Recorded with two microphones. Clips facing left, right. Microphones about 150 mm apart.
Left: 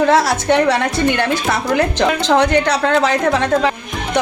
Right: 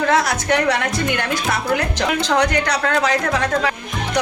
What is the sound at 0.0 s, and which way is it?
A woman's voice, 30° left (ahead or behind).